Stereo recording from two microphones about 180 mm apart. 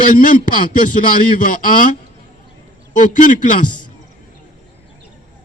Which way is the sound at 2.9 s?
45° left (ahead or behind).